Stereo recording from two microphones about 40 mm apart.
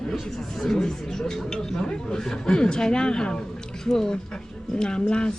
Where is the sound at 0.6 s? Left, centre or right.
Centre.